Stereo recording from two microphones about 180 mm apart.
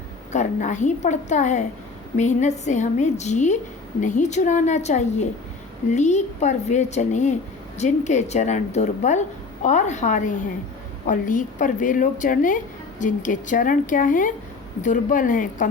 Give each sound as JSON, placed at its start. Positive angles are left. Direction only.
{"t": 0.3, "sound": "a woman's voice", "side_deg": 45}